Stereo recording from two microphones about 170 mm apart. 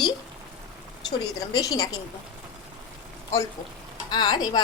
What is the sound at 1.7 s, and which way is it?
Speech, 20° left (ahead or behind).